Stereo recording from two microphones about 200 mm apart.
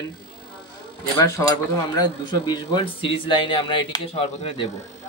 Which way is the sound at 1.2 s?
15° left (ahead or behind).